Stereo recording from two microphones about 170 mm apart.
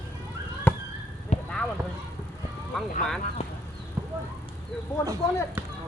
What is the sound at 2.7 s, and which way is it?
Speech, 5° left (ahead or behind).